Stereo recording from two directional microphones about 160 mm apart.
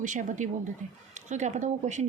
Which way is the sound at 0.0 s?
50° right (ahead or behind).